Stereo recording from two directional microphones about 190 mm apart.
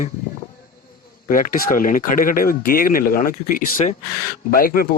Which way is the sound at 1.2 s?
45° left (ahead or behind).